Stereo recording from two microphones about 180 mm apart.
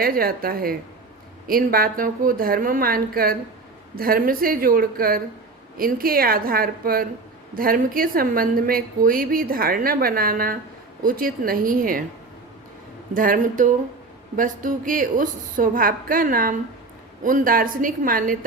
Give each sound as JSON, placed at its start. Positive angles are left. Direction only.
{"t": 0.0, "sound": "a woman's voice", "side_deg": -55}
{"t": 13.1, "sound": "a woman's voice", "side_deg": -50}